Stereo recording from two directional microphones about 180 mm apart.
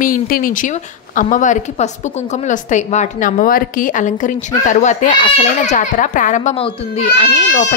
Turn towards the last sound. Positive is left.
turn(degrees=45)  # may be behind; listen again after turning